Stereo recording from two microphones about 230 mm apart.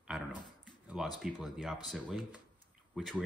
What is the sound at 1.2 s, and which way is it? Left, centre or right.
Speech, centre.